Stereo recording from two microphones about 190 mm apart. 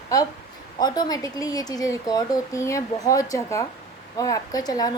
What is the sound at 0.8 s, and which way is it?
A woman's voice, 20° left (ahead or behind).